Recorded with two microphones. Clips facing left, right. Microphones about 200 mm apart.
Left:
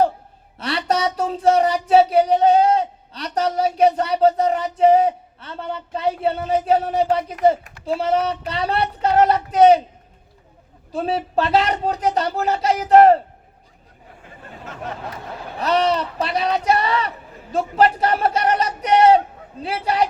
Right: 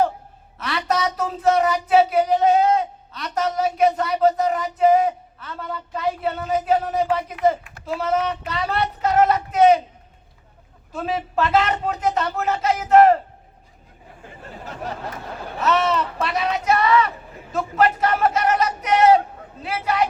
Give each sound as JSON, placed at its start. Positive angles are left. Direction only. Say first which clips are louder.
{"t": 0.6, "sound": "speech", "louder": "left 2 dB", "side_deg": 30}
{"t": 10.9, "sound": "speech", "louder": "left 3 dB", "side_deg": 35}
{"t": 15.5, "sound": "speech", "louder": "left 1 dB", "side_deg": 35}